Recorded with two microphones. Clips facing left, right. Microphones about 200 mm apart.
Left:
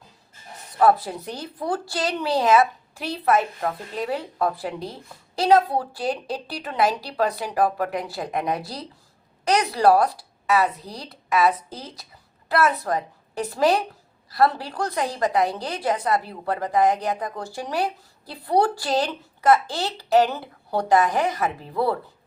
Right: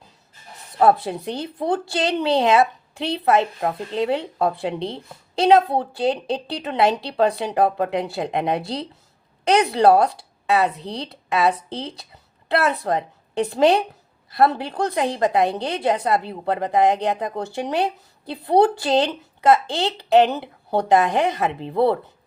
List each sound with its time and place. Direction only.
0.8 s a woman's voice: 25° right (ahead or behind)